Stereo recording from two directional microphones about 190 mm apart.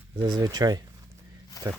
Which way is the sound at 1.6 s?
20° left (ahead or behind).